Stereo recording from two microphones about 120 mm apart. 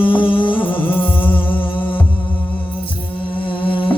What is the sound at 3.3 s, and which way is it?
Music, 45° left (ahead or behind).